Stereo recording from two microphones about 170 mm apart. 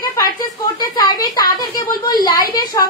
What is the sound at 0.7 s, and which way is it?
Speech, 20° left (ahead or behind).